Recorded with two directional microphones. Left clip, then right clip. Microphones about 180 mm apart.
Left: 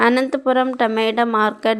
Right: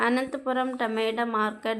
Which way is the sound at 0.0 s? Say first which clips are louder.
Left 10 dB; 40° left (ahead or behind).